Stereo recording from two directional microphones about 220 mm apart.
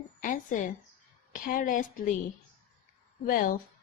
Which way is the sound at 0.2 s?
35° left (ahead or behind).